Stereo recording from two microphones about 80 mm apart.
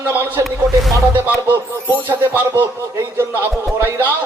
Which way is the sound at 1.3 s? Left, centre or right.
Right.